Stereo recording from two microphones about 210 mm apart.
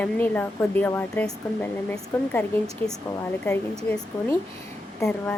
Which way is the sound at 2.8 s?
25° right (ahead or behind).